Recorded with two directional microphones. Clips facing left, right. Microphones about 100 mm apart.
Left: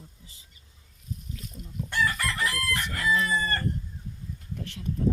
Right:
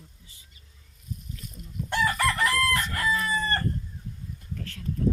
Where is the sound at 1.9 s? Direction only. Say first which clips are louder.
Right 3 dB; 40° right (ahead or behind).